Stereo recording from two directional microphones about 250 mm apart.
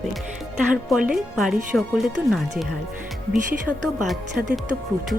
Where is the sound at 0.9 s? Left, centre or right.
Centre.